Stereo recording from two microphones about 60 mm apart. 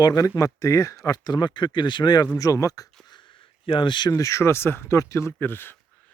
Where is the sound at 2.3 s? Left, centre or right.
Left.